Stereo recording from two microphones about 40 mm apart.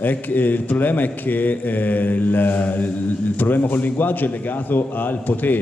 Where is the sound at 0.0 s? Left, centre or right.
Left.